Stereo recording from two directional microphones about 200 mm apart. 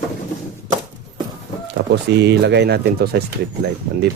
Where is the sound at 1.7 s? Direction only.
60° right (ahead or behind).